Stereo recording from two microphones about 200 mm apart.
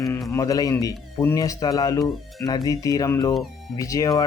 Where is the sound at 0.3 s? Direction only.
15° left (ahead or behind).